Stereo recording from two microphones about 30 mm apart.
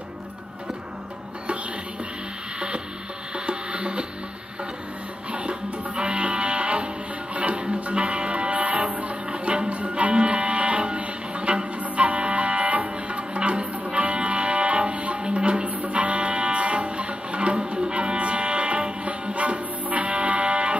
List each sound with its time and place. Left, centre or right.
3.3 s music: right
5.3 s music: right
11.8 s music: right
15.6 s music: right